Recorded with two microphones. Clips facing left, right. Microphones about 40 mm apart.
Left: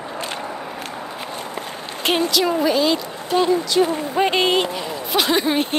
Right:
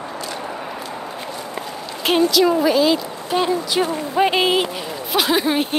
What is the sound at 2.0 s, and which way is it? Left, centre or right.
Speech, centre.